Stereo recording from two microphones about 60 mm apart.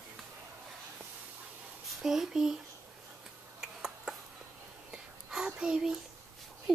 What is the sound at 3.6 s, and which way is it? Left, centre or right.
Tick-tock, centre.